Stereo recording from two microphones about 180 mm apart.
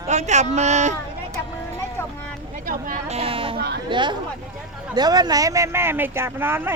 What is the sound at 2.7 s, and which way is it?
Speech, 50° right (ahead or behind).